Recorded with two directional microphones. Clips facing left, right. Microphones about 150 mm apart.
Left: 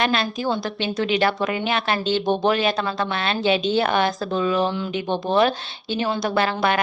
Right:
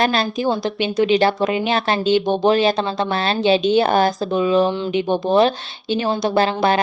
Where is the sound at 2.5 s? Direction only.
30° right (ahead or behind).